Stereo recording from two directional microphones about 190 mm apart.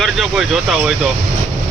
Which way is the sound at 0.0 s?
Centre (ahead or behind).